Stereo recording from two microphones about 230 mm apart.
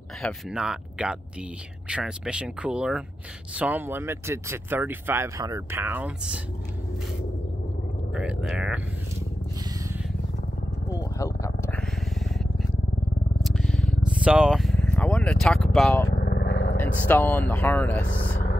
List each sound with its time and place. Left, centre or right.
0.2 s speech: centre
8.1 s speech: centre
10.9 s vehicle: centre
12.0 s vehicle: centre
13.4 s a sound: centre
14.2 s vehicle: centre
16.1 s vehicle: left
16.7 s speech: centre